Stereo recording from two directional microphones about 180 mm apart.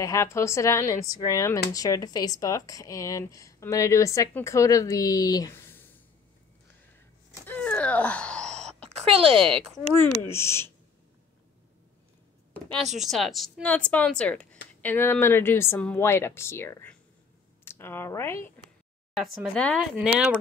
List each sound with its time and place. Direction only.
0.0 s speech: 15° left (ahead or behind)
7.4 s wail: 5° left (ahead or behind)
8.8 s speech: 35° right (ahead or behind)
10.2 s speech: 15° left (ahead or behind)
12.6 s speech: 30° right (ahead or behind)
12.9 s speech: centre (ahead or behind)
19.1 s speech: centre (ahead or behind)